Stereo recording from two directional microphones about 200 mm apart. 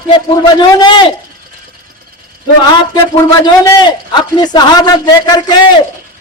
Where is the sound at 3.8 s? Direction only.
20° left (ahead or behind).